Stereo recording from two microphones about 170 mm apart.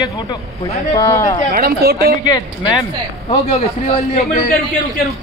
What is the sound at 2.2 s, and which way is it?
Speech, 25° left (ahead or behind).